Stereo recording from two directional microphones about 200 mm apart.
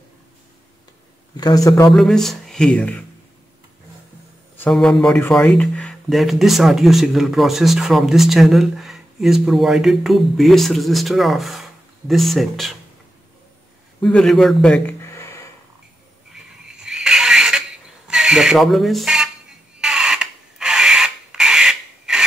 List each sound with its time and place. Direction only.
1.3 s a man's voice: 20° left (ahead or behind)
1.9 s speech: centre (ahead or behind)
4.6 s speech: 5° left (ahead or behind)
14.0 s a man's voice: 5° left (ahead or behind)
16.6 s a sound: 5° right (ahead or behind)